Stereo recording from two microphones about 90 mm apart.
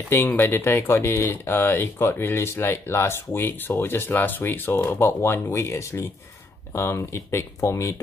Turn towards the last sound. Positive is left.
turn(degrees=30)  # may be behind; listen again after turning